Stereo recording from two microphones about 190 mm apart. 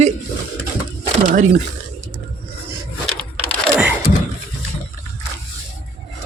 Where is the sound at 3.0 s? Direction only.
5° left (ahead or behind).